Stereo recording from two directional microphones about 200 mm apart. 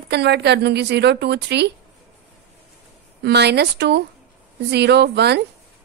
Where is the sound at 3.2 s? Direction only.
55° right (ahead or behind).